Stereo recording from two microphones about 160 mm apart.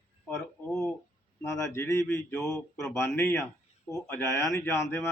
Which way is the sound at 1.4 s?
15° left (ahead or behind).